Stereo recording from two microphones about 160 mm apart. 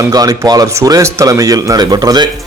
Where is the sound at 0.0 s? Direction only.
20° right (ahead or behind).